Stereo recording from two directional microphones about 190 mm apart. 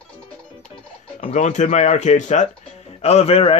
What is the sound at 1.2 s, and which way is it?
Speech, 40° left (ahead or behind).